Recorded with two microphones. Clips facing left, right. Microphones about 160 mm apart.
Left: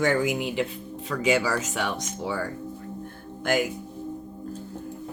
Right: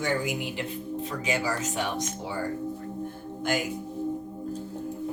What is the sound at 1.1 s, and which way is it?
Speech, 90° left.